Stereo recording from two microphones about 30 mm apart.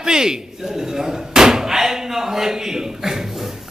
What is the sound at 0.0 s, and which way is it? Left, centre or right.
A man's voice, right.